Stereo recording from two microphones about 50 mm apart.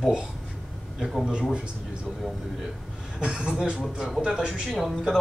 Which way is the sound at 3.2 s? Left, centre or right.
Centre.